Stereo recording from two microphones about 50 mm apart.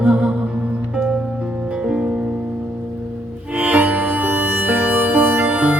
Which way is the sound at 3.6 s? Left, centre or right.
Right.